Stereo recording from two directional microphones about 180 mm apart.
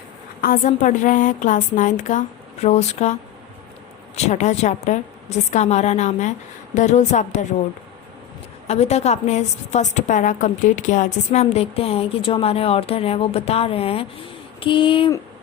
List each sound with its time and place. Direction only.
0.4 s a woman's voice: 45° left (ahead or behind)
8.6 s a woman's voice: 35° left (ahead or behind)